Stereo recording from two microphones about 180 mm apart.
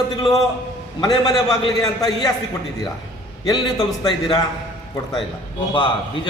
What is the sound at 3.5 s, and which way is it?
Speech, 25° left (ahead or behind).